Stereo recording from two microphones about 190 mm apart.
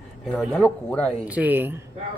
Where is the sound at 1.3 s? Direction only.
10° right (ahead or behind).